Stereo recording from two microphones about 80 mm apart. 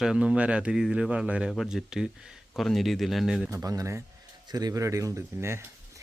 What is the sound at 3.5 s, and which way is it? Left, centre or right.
A man's voice, right.